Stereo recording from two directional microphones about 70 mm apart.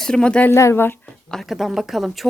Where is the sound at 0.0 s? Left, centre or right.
Centre.